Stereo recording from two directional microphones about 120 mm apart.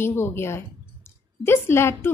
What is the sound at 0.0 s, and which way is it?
A woman's voice, 20° left (ahead or behind).